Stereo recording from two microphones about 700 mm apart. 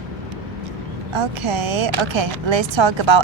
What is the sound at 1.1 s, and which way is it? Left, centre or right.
Speech, right.